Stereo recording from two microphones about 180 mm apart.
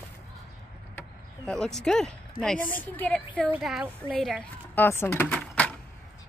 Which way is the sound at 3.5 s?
5° right (ahead or behind).